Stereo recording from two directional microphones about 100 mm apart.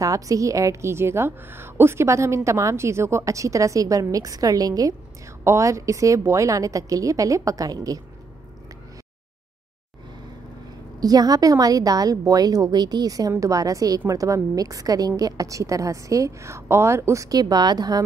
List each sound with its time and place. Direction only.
0.0 s a woman's voice: 35° right (ahead or behind)
11.0 s a woman's voice: 40° right (ahead or behind)